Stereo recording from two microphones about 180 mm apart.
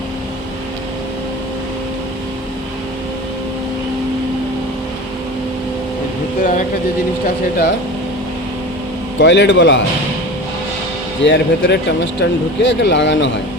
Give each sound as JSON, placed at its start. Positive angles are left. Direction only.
{"t": 6.4, "sound": "a sound", "side_deg": 45}
{"t": 9.1, "sound": "speech", "side_deg": 85}
{"t": 11.2, "sound": "speech", "side_deg": 90}